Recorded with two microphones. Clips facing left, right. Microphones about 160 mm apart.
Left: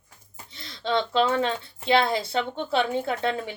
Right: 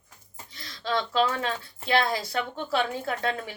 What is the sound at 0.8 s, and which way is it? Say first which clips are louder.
A woman's voice: left 2 dB; 25° left (ahead or behind).